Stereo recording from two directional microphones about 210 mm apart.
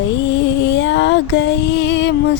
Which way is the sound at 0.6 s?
55° left (ahead or behind).